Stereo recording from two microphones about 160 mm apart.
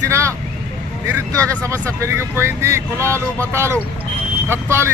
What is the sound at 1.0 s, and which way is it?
Speech, 20° right (ahead or behind).